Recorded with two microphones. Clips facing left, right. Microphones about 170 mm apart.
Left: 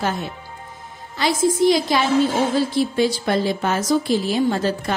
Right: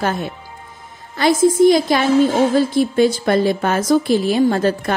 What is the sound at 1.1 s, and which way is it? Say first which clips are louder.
A woman's voice: right 5 dB; 50° right (ahead or behind).